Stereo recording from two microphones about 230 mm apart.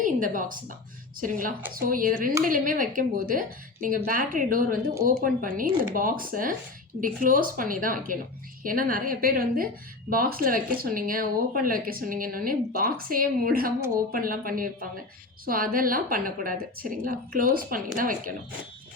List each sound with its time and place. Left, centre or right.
0.0 s a woman's voice: right